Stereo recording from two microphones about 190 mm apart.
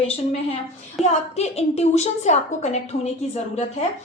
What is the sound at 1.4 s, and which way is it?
A woman's voice, 35° left (ahead or behind).